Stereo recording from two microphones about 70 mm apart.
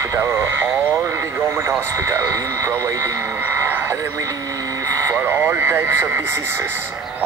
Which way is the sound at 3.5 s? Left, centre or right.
Right.